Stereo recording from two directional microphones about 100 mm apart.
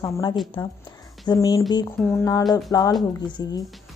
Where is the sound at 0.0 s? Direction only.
40° left (ahead or behind).